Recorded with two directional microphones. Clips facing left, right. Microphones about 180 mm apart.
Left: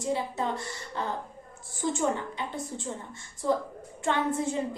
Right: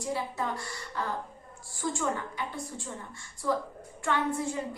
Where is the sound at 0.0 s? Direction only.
25° left (ahead or behind).